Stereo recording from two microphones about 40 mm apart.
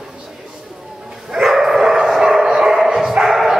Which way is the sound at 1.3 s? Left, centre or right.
Centre.